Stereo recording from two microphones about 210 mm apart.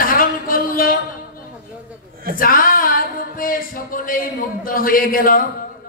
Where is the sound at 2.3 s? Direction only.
40° left (ahead or behind).